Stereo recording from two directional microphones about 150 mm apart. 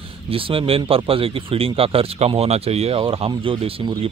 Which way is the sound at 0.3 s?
35° right (ahead or behind).